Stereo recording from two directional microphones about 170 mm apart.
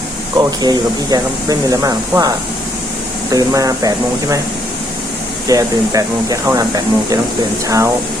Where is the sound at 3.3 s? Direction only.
20° right (ahead or behind).